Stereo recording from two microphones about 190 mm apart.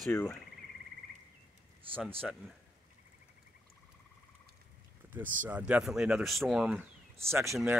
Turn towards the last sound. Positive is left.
turn(degrees=-15)  # may be behind; listen again after turning